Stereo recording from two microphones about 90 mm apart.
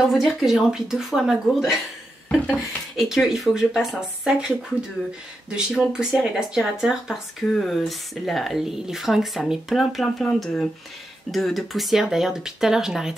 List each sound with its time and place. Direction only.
0.0 s speech: centre (ahead or behind)
2.2 s a sound: 15° left (ahead or behind)
3.0 s speech: 5° right (ahead or behind)
5.7 s speech: centre (ahead or behind)
10.2 s speech: 10° left (ahead or behind); by 13.1 s 5° right (ahead or behind)